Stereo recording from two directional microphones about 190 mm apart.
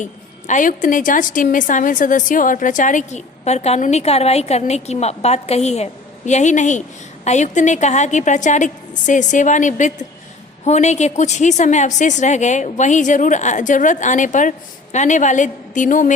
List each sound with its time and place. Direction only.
0.0 s a woman's voice: 40° left (ahead or behind)